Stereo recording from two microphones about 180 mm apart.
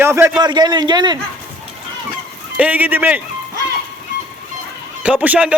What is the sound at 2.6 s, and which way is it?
Speech, 10° right (ahead or behind).